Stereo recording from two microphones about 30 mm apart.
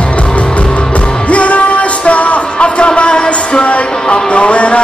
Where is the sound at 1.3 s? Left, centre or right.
Left.